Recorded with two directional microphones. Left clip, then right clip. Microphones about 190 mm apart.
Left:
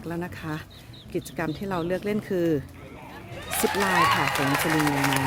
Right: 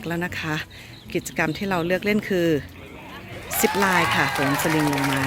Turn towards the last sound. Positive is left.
turn(degrees=0)  # may be behind; listen again after turning